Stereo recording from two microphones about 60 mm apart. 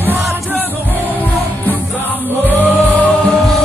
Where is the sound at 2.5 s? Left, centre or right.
Left.